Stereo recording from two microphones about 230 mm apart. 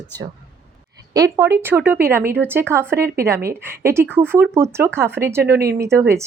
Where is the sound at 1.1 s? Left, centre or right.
Centre.